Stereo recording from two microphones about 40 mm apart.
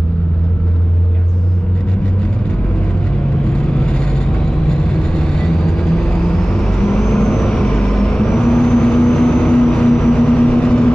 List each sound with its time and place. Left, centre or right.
3.5 s vehicle: left